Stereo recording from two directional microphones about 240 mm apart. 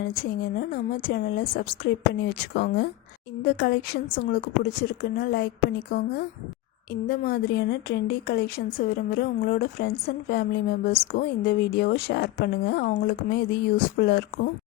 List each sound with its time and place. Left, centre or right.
0.0 s a woman's voice: left
6.9 s a woman's voice: left